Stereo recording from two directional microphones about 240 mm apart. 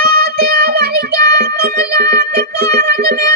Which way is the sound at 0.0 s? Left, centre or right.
Right.